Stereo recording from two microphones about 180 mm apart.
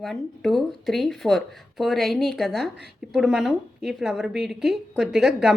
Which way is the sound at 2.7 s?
65° right (ahead or behind).